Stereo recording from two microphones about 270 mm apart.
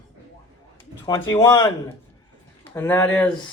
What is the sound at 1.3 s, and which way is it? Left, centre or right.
Speech, centre.